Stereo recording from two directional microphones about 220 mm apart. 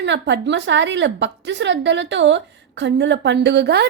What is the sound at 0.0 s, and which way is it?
A woman's voice, 55° right (ahead or behind).